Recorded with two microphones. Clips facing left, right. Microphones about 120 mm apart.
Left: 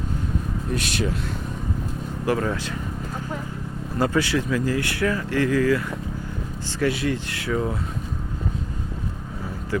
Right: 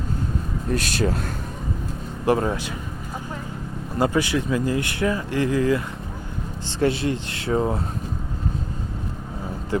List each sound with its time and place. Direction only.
0.7 s speech: 40° right (ahead or behind)
2.2 s speech: 25° right (ahead or behind)
3.9 s speech: 15° right (ahead or behind)